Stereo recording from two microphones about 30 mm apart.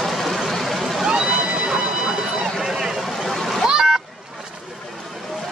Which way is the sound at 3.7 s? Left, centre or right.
Right.